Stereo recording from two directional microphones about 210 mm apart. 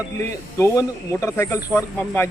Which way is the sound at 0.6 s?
15° left (ahead or behind).